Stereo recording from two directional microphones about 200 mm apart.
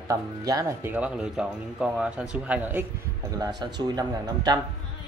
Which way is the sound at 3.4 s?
20° right (ahead or behind).